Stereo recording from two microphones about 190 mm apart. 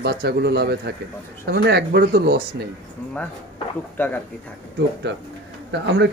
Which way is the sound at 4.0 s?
10° left (ahead or behind).